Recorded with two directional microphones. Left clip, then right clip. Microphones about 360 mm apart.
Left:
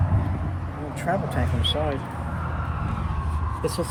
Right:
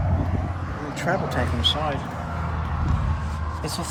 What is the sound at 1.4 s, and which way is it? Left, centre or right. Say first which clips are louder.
Speech: right 2 dB; right.